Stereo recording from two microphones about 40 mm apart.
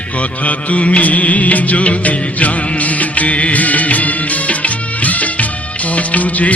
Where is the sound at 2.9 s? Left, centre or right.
Left.